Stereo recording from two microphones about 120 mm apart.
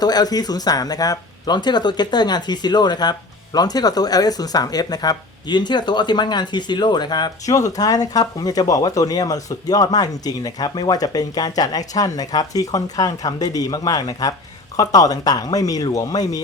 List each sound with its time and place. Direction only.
0.0 s speech: 35° left (ahead or behind)